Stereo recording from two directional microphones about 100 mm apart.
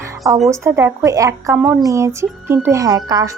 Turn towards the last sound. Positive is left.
turn(degrees=-40)  # may be behind; listen again after turning